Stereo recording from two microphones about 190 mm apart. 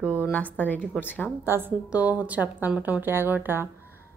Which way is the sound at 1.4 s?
10° right (ahead or behind).